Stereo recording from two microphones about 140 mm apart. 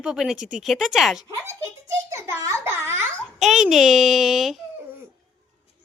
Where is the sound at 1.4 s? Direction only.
20° right (ahead or behind).